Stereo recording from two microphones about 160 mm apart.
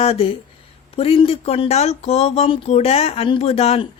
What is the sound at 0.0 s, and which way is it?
A woman's voice, 40° left (ahead or behind).